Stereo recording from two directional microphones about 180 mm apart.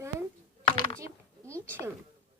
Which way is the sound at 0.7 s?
25° left (ahead or behind).